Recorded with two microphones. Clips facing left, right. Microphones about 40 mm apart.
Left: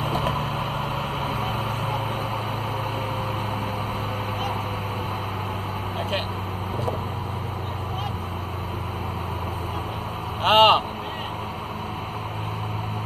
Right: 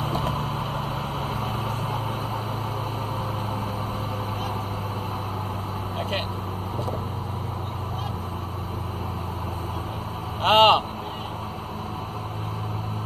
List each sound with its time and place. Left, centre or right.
0.0 s vehicle: left
10.4 s vehicle: left